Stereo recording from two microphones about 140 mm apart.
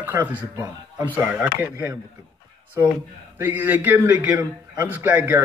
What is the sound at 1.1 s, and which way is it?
Speech, 10° right (ahead or behind).